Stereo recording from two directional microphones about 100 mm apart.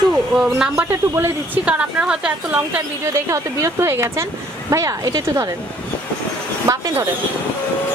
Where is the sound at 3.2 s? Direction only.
25° right (ahead or behind).